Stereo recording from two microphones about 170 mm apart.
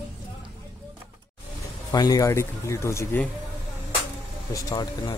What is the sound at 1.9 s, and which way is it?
Speech, 20° left (ahead or behind).